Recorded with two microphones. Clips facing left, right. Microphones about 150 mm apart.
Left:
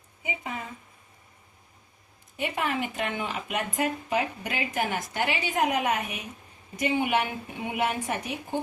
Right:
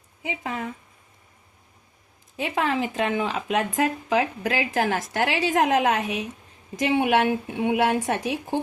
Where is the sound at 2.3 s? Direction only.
90° right.